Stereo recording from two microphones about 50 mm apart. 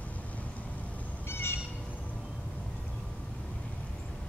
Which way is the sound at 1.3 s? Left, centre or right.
Left.